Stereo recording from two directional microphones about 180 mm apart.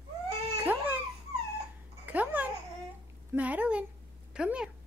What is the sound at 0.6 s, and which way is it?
Baby cry, 10° right (ahead or behind).